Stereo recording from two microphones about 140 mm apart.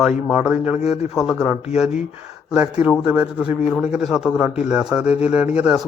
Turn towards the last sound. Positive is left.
turn(degrees=-10)  # may be behind; listen again after turning